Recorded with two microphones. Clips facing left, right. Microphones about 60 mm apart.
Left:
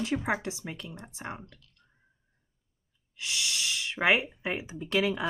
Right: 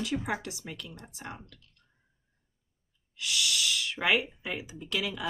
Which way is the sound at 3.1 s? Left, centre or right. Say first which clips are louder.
Right 2 dB; left.